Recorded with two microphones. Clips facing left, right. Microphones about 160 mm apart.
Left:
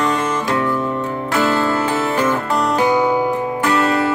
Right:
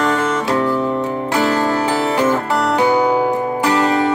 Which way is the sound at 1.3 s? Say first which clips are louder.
Even; 15° right (ahead or behind).